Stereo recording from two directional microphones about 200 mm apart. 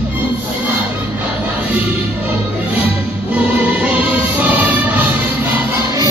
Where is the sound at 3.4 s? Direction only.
5° right (ahead or behind).